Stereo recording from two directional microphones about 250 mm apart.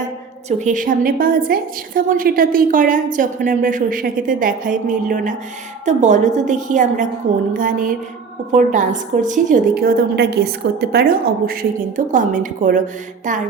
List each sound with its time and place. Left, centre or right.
0.6 s a woman's voice: right